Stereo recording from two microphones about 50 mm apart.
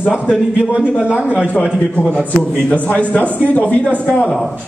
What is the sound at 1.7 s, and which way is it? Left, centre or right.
Speech, centre.